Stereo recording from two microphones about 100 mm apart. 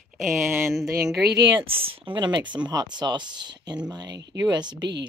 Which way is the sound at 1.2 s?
45° right (ahead or behind).